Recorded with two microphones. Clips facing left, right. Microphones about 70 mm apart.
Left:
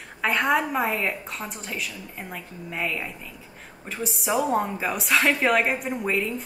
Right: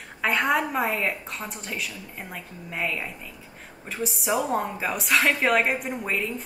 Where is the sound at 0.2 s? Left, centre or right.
Centre.